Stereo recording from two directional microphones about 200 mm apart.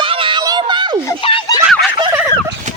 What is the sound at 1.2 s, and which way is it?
Speech, 25° left (ahead or behind).